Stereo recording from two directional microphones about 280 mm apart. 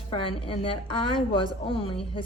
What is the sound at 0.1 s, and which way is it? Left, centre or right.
A woman's voice, centre.